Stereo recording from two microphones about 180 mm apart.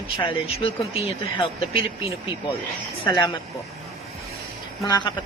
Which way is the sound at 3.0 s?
25° left (ahead or behind).